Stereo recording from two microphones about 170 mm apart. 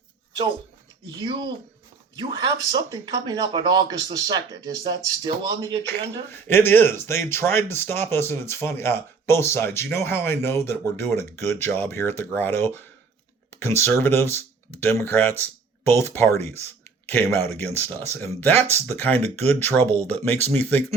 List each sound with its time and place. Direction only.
1.2 s speech: 25° right (ahead or behind)
6.3 s speech: 10° left (ahead or behind)